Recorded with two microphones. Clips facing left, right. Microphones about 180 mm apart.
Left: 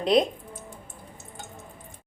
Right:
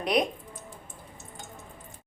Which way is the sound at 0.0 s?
25° left (ahead or behind).